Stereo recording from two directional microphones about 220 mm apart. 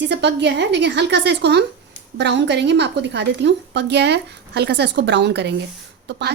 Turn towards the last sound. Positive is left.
turn(degrees=-50)  # may be behind; listen again after turning